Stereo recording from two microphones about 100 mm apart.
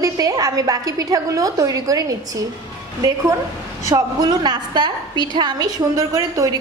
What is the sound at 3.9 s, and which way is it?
A woman's voice, 45° right (ahead or behind).